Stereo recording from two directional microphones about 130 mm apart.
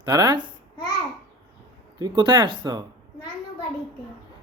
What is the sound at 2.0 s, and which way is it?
Speech, 35° right (ahead or behind).